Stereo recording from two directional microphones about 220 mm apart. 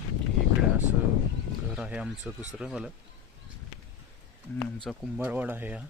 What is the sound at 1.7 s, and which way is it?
Speech, 5° right (ahead or behind).